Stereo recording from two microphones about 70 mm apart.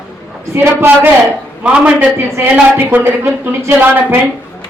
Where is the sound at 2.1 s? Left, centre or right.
Right.